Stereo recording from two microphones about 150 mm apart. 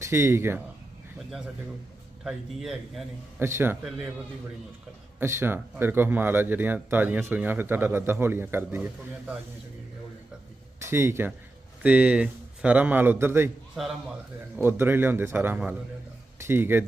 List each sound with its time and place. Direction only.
0.0 s speech: 20° right (ahead or behind)
2.2 s a man's voice: 5° right (ahead or behind)
3.3 s speech: 15° right (ahead or behind)
3.8 s a man's voice: 5° right (ahead or behind)
5.2 s speech: 15° right (ahead or behind)
10.8 s speech: 15° right (ahead or behind)
14.5 s speech: 15° right (ahead or behind)